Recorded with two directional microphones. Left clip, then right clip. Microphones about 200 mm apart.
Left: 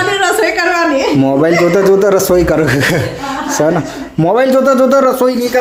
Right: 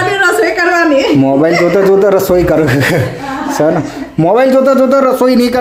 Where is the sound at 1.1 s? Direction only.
Centre (ahead or behind).